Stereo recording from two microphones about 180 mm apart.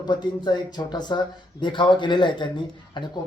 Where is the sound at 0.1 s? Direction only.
25° left (ahead or behind).